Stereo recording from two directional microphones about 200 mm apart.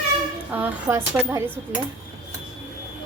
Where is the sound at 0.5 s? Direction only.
10° right (ahead or behind).